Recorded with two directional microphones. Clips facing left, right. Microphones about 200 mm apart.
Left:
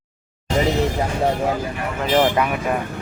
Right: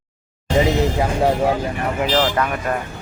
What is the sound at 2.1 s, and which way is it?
Speech, 15° left (ahead or behind).